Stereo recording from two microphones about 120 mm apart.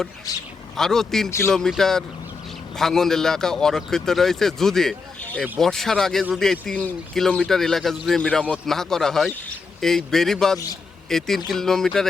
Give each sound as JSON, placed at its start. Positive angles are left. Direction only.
{"t": 0.3, "sound": "speech", "side_deg": 30}
{"t": 0.8, "sound": "a man's voice", "side_deg": 5}
{"t": 1.3, "sound": "speech", "side_deg": 20}
{"t": 1.5, "sound": "a man's voice", "side_deg": 5}